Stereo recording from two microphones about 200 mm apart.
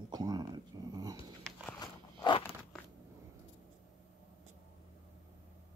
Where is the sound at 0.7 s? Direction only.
20° right (ahead or behind).